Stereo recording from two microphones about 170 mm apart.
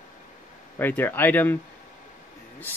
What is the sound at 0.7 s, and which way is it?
Speech, 10° left (ahead or behind).